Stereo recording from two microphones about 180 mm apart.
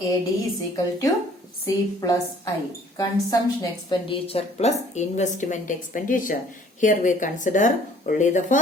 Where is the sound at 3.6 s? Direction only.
25° left (ahead or behind).